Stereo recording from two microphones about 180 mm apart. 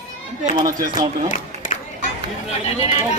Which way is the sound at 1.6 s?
45° left (ahead or behind).